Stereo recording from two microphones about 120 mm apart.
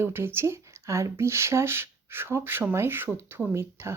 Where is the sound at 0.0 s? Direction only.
20° right (ahead or behind).